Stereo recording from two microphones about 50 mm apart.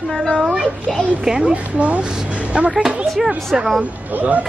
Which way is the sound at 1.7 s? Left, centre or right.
Right.